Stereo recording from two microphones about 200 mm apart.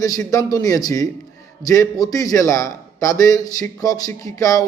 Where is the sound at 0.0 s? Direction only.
15° left (ahead or behind).